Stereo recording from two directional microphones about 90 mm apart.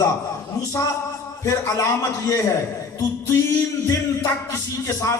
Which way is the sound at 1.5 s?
35° left (ahead or behind).